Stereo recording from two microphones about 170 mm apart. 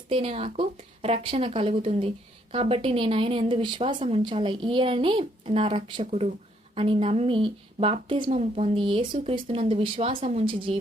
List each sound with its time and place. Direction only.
0.1 s speech: 35° right (ahead or behind)